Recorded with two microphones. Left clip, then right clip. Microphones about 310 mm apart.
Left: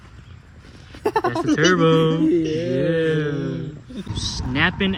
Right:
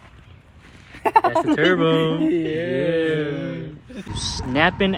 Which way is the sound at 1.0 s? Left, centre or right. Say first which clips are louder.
Right 4 dB; right.